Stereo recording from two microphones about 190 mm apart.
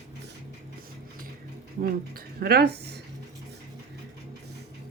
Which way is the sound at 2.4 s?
55° right (ahead or behind).